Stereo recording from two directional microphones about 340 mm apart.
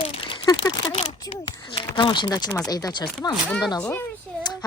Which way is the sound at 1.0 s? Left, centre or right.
Left.